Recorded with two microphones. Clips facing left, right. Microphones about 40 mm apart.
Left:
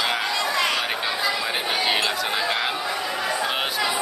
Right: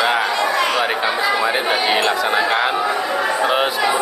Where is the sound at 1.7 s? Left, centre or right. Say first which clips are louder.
Right 6 dB; centre.